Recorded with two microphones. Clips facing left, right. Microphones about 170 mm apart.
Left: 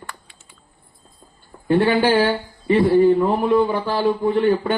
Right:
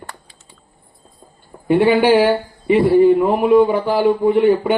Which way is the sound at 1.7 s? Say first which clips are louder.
Right 4 dB; 15° right (ahead or behind).